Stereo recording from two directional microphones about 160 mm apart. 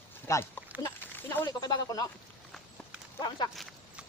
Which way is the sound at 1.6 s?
25° left (ahead or behind).